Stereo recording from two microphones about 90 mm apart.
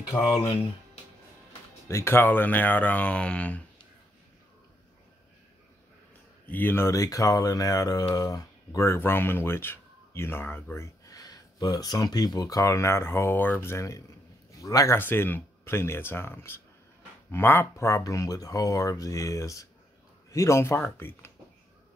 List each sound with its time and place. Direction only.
1.9 s speech: 30° left (ahead or behind); by 3.6 s 15° left (ahead or behind)
6.4 s speech: 20° left (ahead or behind)
6.9 s speech: 40° left (ahead or behind)
15.0 s speech: 20° left (ahead or behind)